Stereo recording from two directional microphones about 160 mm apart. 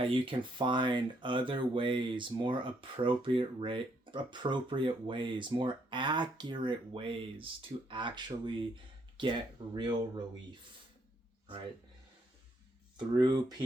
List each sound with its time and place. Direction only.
0.0 s speech: 35° right (ahead or behind)
13.1 s speech: 25° right (ahead or behind)